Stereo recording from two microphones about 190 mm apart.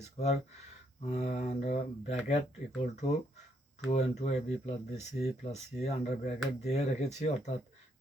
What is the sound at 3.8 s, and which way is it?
Speech, 35° left (ahead or behind).